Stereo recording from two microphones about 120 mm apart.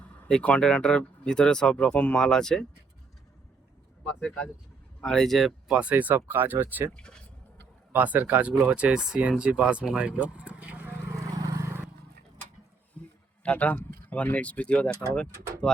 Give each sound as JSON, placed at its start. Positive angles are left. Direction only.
{"t": 0.3, "sound": "speech", "side_deg": 10}
{"t": 4.9, "sound": "speech", "side_deg": 5}
{"t": 6.9, "sound": "speech", "side_deg": 5}
{"t": 7.9, "sound": "speech", "side_deg": -15}
{"t": 11.2, "sound": "vehicle", "side_deg": -30}
{"t": 13.0, "sound": "a sound", "side_deg": 10}
{"t": 13.4, "sound": "speech", "side_deg": 10}